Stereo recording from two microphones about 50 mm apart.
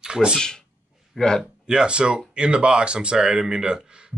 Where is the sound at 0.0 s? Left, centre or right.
Centre.